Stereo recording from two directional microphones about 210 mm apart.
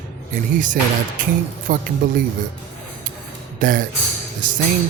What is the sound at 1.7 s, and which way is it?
Speech, 40° right (ahead or behind).